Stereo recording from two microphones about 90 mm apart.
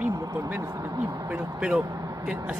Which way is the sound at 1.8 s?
45° right (ahead or behind).